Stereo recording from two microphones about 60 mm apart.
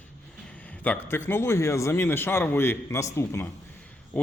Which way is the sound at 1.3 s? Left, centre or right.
Left.